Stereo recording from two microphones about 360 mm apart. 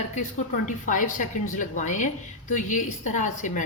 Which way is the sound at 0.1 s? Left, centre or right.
Left.